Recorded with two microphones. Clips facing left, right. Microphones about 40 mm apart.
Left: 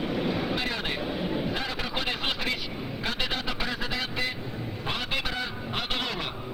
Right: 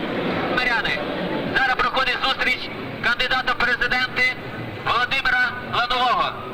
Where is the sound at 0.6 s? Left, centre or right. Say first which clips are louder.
Right 10 dB; right.